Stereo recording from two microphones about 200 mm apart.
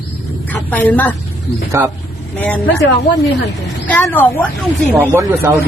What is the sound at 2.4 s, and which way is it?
Speech, 10° left (ahead or behind).